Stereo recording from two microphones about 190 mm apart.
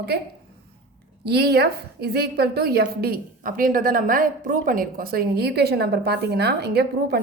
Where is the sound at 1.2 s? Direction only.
55° right (ahead or behind).